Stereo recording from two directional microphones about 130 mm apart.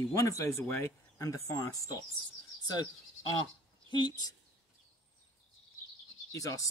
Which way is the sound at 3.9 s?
35° left (ahead or behind).